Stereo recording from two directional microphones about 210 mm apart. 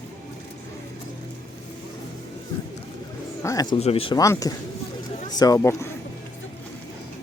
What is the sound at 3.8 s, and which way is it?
Speech, 30° left (ahead or behind).